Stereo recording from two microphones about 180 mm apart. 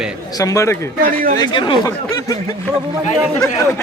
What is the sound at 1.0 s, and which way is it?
Speech, 50° right (ahead or behind).